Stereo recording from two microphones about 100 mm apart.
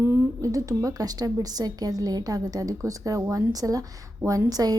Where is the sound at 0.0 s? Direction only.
30° right (ahead or behind).